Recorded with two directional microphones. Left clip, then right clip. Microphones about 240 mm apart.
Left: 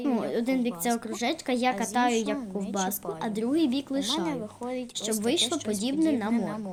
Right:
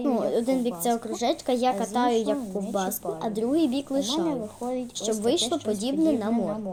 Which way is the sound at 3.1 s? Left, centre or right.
Centre.